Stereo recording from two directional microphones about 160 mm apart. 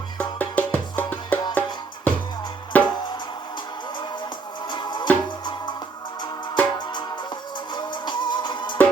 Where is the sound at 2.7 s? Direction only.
10° left (ahead or behind).